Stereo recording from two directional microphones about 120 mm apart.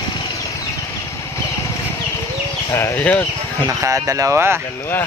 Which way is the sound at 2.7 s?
15° left (ahead or behind).